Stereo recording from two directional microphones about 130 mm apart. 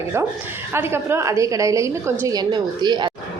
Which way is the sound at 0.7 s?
20° right (ahead or behind).